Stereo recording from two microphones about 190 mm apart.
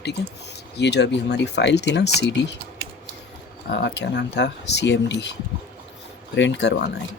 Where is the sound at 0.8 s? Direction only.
65° left (ahead or behind).